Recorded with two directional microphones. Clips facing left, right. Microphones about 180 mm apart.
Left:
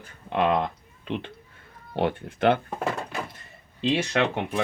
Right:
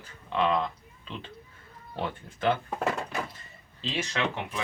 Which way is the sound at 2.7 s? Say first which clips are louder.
Left 1 dB; centre (ahead or behind).